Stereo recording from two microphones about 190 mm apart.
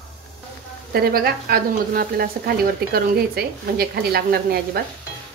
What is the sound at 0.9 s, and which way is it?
A woman's voice, 55° right (ahead or behind).